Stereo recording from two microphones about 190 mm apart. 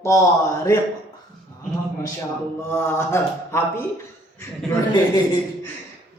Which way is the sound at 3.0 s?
15° left (ahead or behind).